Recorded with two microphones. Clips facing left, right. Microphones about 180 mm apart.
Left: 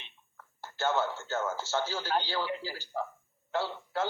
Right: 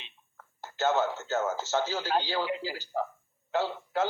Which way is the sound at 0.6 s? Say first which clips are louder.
Right 3 dB; 20° right (ahead or behind).